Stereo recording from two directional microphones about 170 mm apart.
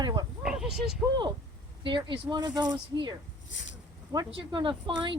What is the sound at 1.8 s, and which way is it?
Speech, 30° right (ahead or behind).